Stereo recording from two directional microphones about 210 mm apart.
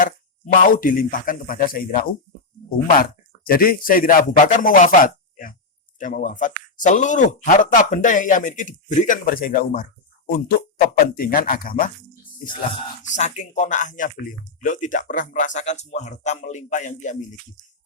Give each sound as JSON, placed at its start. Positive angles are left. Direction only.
{"t": 0.0, "sound": "a man's voice", "side_deg": 40}
{"t": 13.0, "sound": "a man's voice", "side_deg": 35}